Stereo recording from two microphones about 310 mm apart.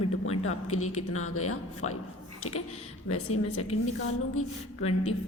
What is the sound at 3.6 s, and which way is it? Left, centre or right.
Speech, centre.